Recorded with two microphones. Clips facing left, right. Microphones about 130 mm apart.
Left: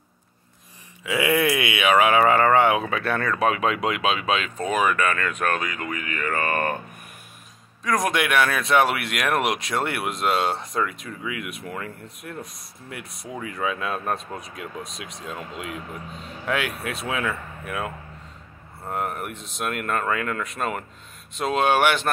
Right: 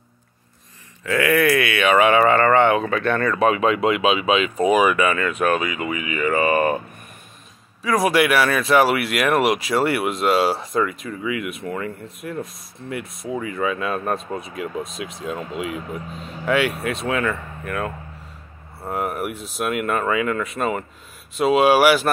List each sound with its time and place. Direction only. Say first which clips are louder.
1.0 s speech: right 3 dB; 15° left (ahead or behind)
1.9 s speech: right 2 dB; 5° left (ahead or behind)
7.8 s speech: right 5 dB; 5° right (ahead or behind)